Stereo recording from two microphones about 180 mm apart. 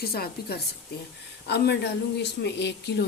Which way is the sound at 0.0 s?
60° left (ahead or behind).